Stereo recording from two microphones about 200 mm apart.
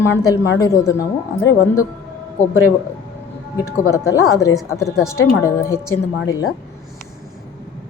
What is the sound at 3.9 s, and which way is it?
A woman's voice, 15° left (ahead or behind).